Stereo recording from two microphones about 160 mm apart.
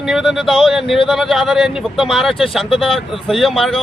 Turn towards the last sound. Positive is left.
turn(degrees=0)  # may be behind; listen again after turning